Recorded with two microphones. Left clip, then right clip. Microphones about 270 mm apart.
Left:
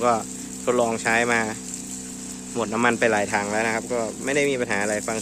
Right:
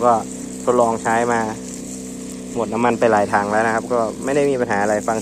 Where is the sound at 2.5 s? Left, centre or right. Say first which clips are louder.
Right 3 dB; centre.